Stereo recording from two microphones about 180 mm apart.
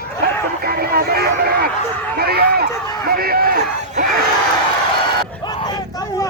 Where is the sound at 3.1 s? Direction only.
55° right (ahead or behind).